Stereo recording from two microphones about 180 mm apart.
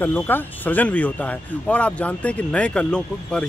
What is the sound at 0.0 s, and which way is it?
Speech, 10° left (ahead or behind).